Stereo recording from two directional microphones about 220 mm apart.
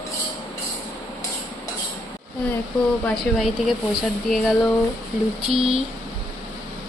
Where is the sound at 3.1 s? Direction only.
Centre (ahead or behind).